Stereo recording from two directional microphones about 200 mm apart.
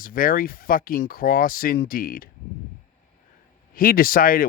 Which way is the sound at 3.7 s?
45° left (ahead or behind).